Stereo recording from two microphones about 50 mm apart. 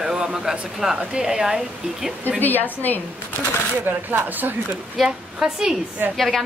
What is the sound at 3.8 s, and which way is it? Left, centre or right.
Speech, right.